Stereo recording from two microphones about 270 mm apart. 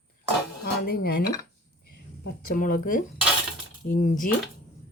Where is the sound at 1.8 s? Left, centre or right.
Left.